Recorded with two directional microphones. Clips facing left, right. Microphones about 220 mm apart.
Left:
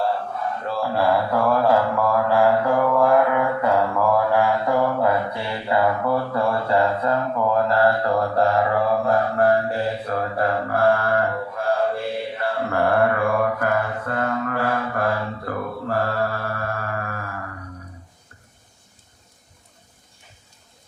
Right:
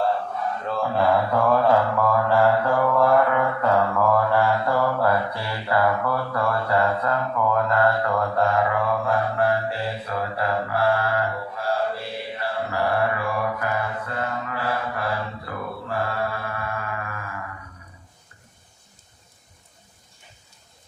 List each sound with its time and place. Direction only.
0.6 s mantra: 5° left (ahead or behind); by 17.4 s 40° left (ahead or behind)